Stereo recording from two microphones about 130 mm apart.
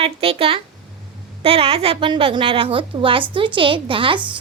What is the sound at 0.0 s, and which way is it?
A woman's voice, 45° right (ahead or behind).